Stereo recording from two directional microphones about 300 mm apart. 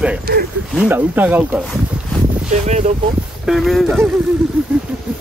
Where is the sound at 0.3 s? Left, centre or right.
Right.